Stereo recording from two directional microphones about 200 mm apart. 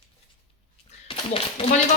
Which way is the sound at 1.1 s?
30° left (ahead or behind).